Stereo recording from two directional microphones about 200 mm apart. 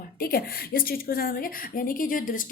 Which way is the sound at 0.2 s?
50° left (ahead or behind).